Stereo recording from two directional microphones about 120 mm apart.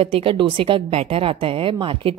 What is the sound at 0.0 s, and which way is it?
A woman's voice, 50° right (ahead or behind).